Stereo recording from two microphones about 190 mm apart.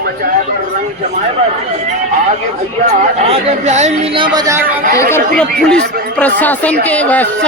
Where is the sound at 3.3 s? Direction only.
35° right (ahead or behind); by 4.6 s 20° right (ahead or behind).